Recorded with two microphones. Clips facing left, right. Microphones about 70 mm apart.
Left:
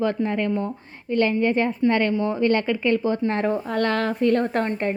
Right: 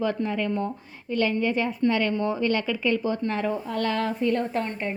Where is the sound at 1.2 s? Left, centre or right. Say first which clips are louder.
Left 4 dB; left.